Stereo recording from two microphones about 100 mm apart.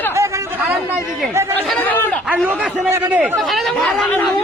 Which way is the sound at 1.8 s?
15° left (ahead or behind).